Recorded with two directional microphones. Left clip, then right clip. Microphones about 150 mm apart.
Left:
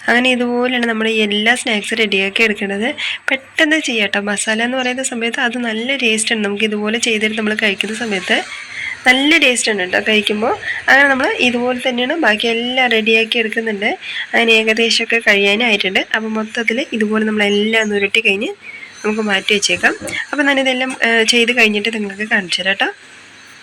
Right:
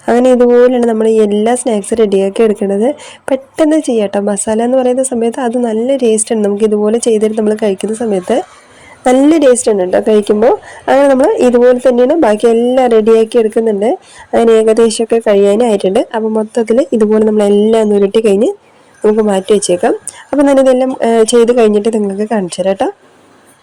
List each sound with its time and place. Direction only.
0.1 s a woman's voice: 20° right (ahead or behind)
2.6 s a woman's voice: 30° right (ahead or behind)